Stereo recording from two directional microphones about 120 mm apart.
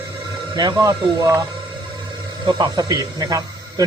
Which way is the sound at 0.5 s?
35° right (ahead or behind).